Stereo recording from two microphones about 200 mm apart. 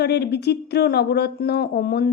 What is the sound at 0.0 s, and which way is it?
A woman's voice, 55° left (ahead or behind).